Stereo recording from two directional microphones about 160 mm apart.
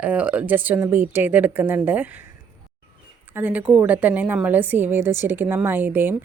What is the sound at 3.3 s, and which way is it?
Speech, 10° right (ahead or behind).